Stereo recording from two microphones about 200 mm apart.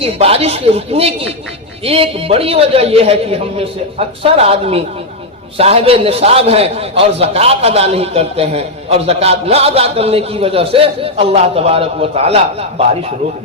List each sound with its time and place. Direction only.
0.0 s a man's voice: 30° right (ahead or behind)